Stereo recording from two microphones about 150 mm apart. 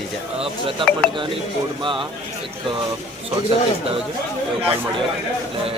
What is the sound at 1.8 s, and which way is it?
Speech, 35° right (ahead or behind).